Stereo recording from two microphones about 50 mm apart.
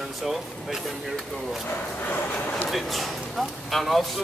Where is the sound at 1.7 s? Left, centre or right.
Left.